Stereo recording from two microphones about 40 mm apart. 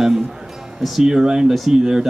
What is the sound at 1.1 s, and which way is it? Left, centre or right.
Speech, centre.